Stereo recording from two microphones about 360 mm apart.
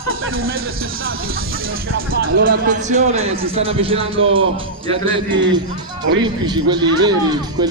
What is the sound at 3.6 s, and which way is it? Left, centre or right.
Speech, centre.